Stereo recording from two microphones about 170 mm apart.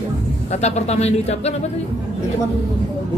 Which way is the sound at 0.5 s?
40° left (ahead or behind).